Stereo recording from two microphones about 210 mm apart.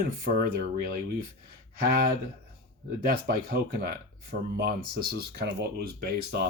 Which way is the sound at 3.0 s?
45° right (ahead or behind).